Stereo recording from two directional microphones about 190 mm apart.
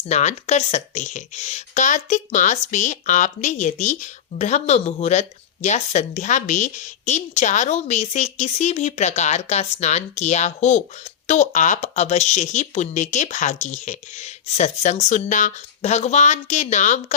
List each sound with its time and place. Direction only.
0.0 s speech: 35° left (ahead or behind)